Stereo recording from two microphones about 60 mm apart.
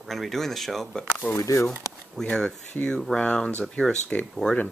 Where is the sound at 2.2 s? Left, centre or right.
Centre.